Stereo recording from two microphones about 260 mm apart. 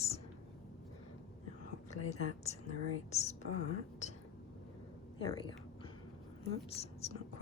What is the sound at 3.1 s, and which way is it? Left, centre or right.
Speech, left.